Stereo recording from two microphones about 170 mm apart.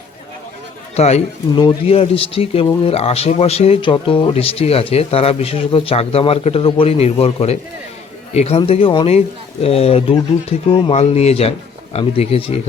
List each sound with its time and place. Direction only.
0.9 s speech: 40° left (ahead or behind)